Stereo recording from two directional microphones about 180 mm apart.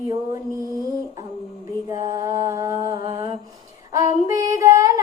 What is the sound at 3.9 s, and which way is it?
Child singing, 20° right (ahead or behind).